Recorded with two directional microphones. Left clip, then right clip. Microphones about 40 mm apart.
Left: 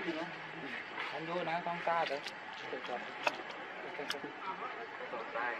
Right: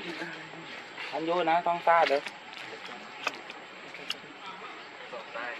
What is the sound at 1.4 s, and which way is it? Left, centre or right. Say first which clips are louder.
Speech: right 12 dB; right.